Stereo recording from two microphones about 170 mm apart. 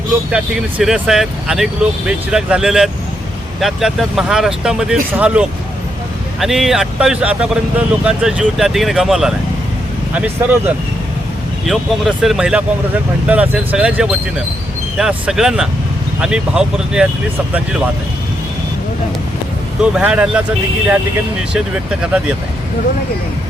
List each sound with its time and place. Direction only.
0.3 s speech: 5° right (ahead or behind)
19.8 s speech: 5° right (ahead or behind)